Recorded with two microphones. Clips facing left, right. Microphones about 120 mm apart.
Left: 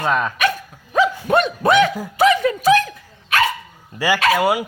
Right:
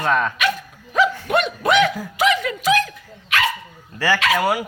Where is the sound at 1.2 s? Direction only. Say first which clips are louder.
Left 3 dB; 35° left (ahead or behind).